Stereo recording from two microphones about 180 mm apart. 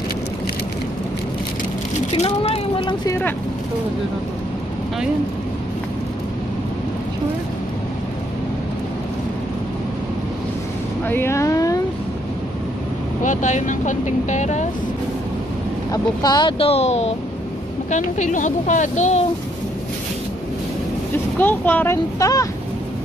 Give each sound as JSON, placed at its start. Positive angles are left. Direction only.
{"t": 2.1, "sound": "speech", "side_deg": 35}
{"t": 11.1, "sound": "vehicle", "side_deg": 15}
{"t": 13.2, "sound": "speech", "side_deg": 45}
{"t": 15.9, "sound": "speech", "side_deg": 20}
{"t": 21.4, "sound": "speech", "side_deg": 10}